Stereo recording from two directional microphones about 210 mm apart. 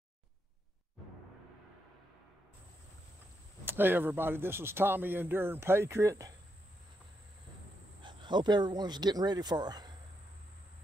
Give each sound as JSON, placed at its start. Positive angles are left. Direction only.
{"t": 3.6, "sound": "speech", "side_deg": -10}
{"t": 8.0, "sound": "speech", "side_deg": -20}